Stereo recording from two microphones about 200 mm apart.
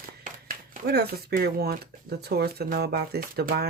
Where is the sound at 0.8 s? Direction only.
50° right (ahead or behind).